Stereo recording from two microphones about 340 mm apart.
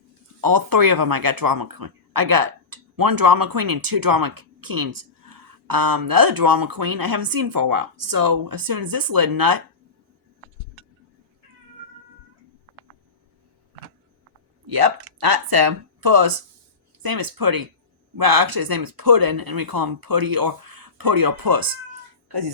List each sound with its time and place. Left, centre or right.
0.4 s speech: right
14.7 s speech: right